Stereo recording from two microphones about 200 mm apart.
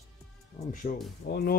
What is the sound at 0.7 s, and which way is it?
Speech, 45° left (ahead or behind).